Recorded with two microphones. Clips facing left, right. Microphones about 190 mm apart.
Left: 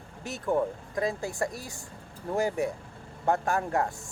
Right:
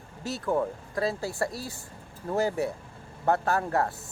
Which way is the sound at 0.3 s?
15° left (ahead or behind).